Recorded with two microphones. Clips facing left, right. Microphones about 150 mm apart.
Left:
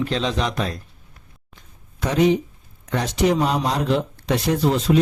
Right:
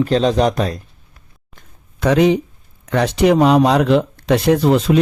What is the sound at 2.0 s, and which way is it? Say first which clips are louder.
Speech: right 5 dB; 80° right.